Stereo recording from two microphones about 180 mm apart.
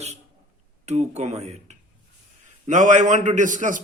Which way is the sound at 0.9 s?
40° right (ahead or behind).